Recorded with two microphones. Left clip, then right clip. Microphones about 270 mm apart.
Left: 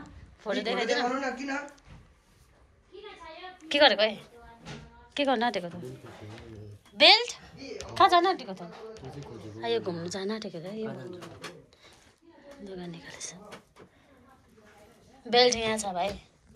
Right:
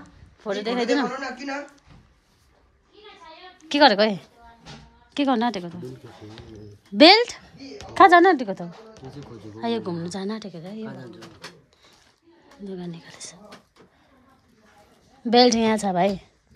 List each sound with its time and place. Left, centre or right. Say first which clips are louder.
0.0 s a sound: right 4 dB; centre
3.5 s a woman's voice: right 5 dB; centre
7.0 s speech: right 6 dB; right
9.6 s speech: right 3 dB; centre
12.6 s speech: right 5 dB; centre
15.2 s a woman's voice: right 6 dB; right